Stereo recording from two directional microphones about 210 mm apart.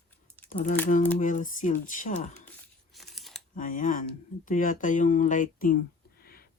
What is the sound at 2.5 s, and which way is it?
Tearing, centre (ahead or behind).